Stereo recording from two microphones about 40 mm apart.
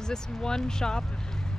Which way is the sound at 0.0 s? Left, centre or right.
Centre.